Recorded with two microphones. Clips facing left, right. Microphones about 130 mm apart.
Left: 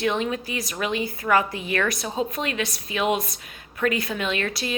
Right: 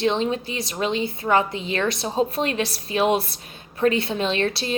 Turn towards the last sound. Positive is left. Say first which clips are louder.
# right 4 dB
turn(degrees=-30)  # may be behind; listen again after turning